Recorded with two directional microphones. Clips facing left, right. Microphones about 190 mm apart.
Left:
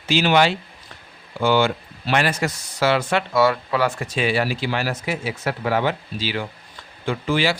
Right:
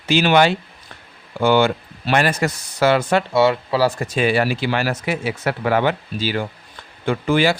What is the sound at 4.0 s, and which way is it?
Speech, 50° right (ahead or behind).